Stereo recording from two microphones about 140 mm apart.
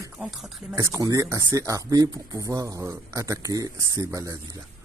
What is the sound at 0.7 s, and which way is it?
Speech, 25° right (ahead or behind).